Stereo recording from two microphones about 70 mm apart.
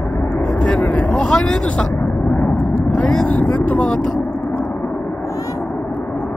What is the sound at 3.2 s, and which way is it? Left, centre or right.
Vehicle, left.